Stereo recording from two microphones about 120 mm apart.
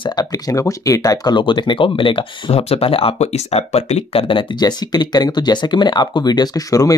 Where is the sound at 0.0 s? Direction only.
35° left (ahead or behind).